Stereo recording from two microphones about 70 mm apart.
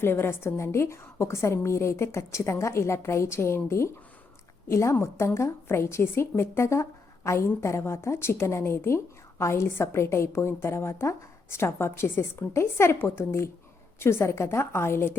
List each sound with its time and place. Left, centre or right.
0.0 s a woman's voice: left